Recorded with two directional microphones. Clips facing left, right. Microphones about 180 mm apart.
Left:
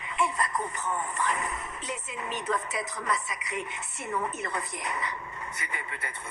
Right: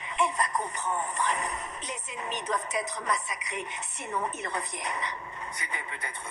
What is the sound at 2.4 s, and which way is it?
Speech, 15° right (ahead or behind).